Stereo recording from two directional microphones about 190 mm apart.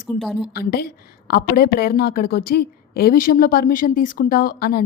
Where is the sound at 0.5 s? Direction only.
55° left (ahead or behind).